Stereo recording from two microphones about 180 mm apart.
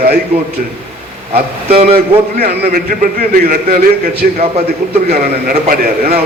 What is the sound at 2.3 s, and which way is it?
A man's voice, 60° right (ahead or behind).